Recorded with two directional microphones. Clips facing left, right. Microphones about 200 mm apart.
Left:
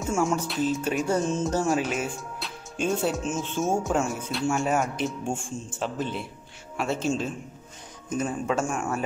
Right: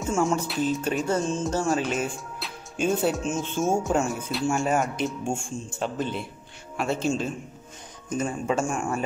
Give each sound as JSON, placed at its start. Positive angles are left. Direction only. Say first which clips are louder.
{"t": 0.1, "sound": "speech", "louder": "right 1 dB", "side_deg": 5}
{"t": 1.5, "sound": "music", "louder": "even", "side_deg": 15}
{"t": 1.8, "sound": "speech", "louder": "right 1 dB", "side_deg": 5}